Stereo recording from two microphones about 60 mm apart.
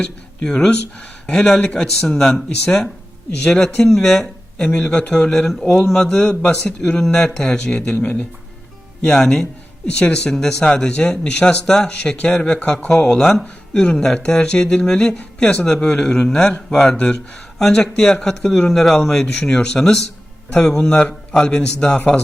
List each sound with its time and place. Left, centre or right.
0.0 s speech: centre
8.0 s speech: left
9.0 s speech: centre